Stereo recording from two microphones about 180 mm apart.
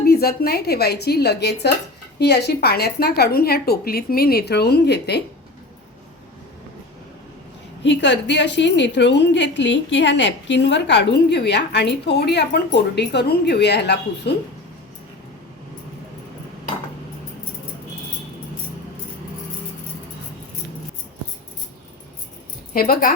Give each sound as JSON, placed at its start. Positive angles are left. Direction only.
{"t": 0.0, "sound": "a woman's voice", "side_deg": 60}
{"t": 7.9, "sound": "a woman's voice", "side_deg": 75}
{"t": 22.7, "sound": "a woman's voice", "side_deg": 55}